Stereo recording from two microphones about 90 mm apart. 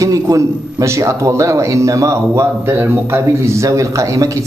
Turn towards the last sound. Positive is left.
turn(degrees=-35)  # may be behind; listen again after turning